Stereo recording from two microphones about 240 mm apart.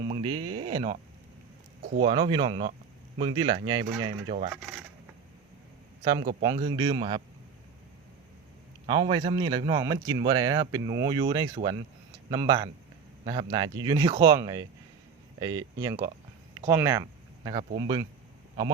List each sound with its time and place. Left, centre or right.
0.1 s speech: right
2.0 s speech: centre
6.4 s speech: centre
8.9 s speech: centre